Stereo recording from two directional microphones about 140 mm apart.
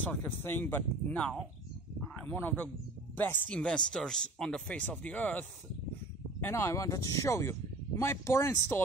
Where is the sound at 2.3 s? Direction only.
10° left (ahead or behind).